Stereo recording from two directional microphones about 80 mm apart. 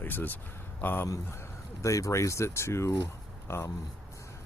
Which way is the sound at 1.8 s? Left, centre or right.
Left.